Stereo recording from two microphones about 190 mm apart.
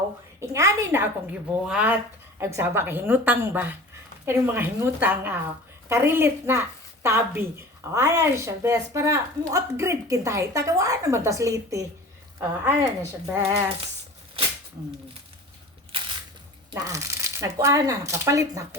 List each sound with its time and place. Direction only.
0.3 s a woman's voice: 15° right (ahead or behind)
16.7 s a woman's voice: 15° right (ahead or behind)